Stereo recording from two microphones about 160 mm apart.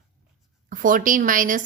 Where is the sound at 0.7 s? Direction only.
55° right (ahead or behind).